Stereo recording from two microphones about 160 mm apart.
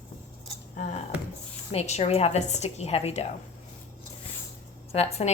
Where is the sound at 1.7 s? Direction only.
40° left (ahead or behind).